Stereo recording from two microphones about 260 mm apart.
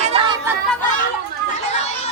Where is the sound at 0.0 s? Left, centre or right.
Right.